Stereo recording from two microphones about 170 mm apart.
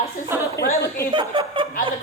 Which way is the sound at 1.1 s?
30° right (ahead or behind).